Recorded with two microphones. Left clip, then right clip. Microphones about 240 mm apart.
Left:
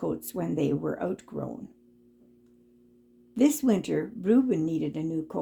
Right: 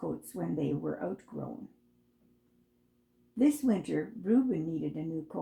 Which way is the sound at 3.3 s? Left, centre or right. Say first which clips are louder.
Left 4 dB; left.